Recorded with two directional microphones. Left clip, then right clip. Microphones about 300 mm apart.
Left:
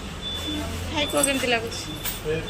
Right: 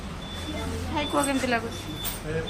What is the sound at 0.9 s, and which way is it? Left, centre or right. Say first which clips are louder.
Speech: left 3 dB; centre.